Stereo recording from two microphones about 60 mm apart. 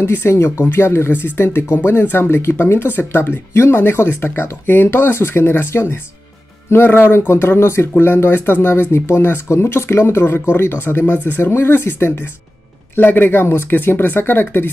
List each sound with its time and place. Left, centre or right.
0.0 s speech: left